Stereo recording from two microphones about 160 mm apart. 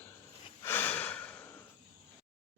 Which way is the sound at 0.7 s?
10° left (ahead or behind).